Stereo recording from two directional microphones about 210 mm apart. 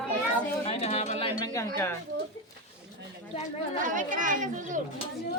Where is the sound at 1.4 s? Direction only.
15° left (ahead or behind).